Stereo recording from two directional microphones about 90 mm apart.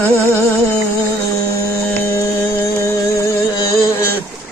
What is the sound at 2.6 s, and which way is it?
Music, 35° left (ahead or behind).